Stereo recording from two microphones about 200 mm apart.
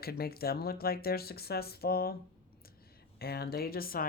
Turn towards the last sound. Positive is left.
turn(degrees=45)  # may be behind; listen again after turning